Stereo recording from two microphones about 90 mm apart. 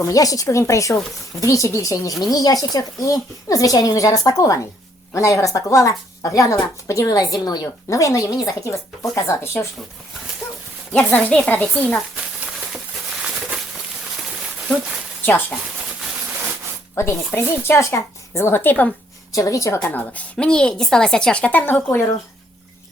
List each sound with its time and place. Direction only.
0.0 s speech: 40° left (ahead or behind)
10.9 s a woman's voice: 10° left (ahead or behind)
15.2 s a woman's voice: 20° left (ahead or behind)
16.9 s speech: 25° left (ahead or behind)
19.3 s speech: 40° left (ahead or behind)
19.9 s a woman's voice: 15° left (ahead or behind)
21.8 s speech: 30° left (ahead or behind)